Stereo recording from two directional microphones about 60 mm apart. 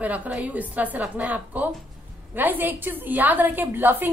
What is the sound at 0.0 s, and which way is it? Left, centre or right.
A woman's voice, right.